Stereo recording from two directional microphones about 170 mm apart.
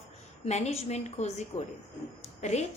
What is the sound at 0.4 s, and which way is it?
A woman's voice, 40° left (ahead or behind).